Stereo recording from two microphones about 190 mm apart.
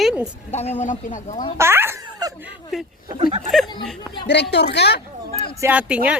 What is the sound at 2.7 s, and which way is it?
Speech, centre (ahead or behind).